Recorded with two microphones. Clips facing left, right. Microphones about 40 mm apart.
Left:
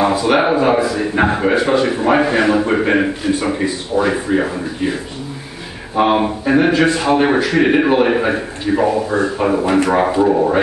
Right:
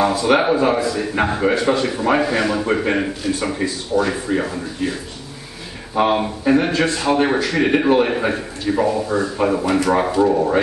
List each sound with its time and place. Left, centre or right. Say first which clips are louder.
0.0 s a man's voice: left 2 dB; centre
5.9 s a man's voice: left 3 dB; centre